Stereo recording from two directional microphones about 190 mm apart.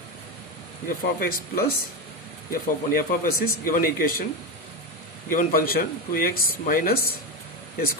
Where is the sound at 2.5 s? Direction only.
50° left (ahead or behind).